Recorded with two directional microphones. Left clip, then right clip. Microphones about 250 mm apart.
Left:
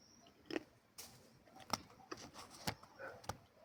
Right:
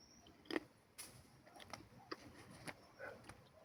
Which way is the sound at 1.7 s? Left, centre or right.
Left.